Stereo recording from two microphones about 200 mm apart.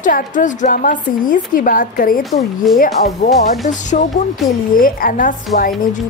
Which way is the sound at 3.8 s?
35° left (ahead or behind).